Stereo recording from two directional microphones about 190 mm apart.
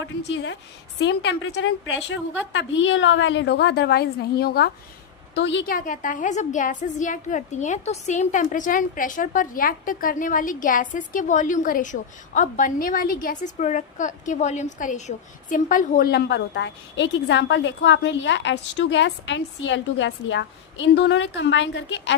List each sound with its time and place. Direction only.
0.2 s a woman's voice: 65° left (ahead or behind)
5.3 s a woman's voice: 65° left (ahead or behind)
5.6 s a woman's voice: 45° left (ahead or behind); by 22.1 s 70° left (ahead or behind)